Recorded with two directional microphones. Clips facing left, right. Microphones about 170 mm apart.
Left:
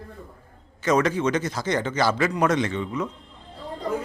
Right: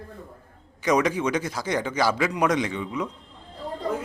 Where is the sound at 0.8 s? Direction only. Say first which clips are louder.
Left 1 dB; 15° right (ahead or behind).